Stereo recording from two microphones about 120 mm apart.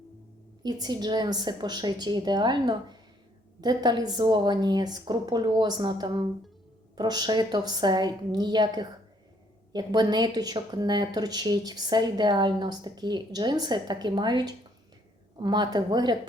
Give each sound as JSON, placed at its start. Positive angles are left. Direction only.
{"t": 0.6, "sound": "a woman's voice", "side_deg": -35}